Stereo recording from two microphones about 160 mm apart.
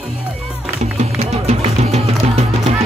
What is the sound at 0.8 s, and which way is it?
Music, 40° right (ahead or behind).